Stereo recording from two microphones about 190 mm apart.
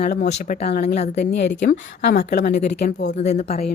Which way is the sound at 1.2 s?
65° left (ahead or behind).